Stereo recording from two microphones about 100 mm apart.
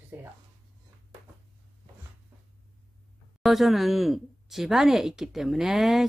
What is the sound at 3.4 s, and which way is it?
Speech, centre (ahead or behind).